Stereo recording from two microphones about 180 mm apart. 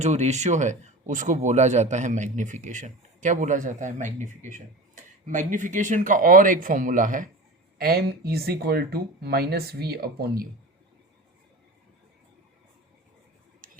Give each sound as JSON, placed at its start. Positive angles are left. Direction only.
{"t": 0.0, "sound": "speech", "side_deg": -40}
{"t": 7.8, "sound": "speech", "side_deg": -60}